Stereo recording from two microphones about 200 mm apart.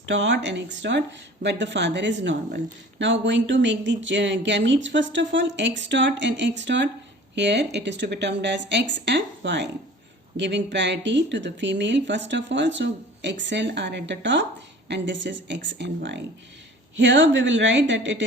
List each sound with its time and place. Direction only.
0.1 s speech: 65° right (ahead or behind)